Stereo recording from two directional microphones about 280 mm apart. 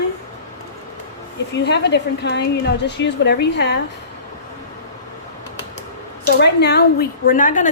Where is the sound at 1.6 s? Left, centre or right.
Left.